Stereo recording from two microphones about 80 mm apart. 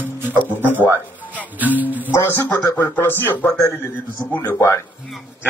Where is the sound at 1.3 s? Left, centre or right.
Right.